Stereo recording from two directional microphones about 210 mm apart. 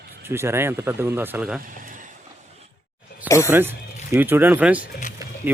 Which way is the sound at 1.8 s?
40° right (ahead or behind).